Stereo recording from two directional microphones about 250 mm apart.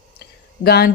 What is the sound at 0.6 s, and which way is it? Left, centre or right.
Speech, left.